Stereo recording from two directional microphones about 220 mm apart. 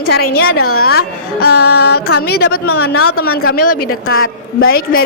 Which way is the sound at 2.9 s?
80° left.